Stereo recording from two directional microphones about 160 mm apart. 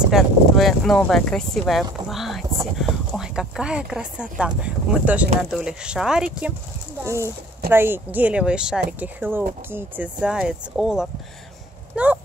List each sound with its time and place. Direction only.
0.1 s speech: centre (ahead or behind)
7.0 s speech: 15° right (ahead or behind)
11.9 s a sound: 10° right (ahead or behind)